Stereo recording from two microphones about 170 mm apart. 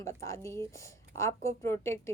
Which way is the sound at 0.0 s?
15° left (ahead or behind).